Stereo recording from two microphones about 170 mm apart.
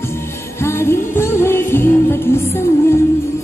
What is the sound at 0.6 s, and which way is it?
Music, 15° left (ahead or behind).